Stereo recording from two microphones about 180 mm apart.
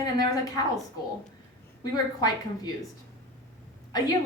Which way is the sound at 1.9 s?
20° left (ahead or behind).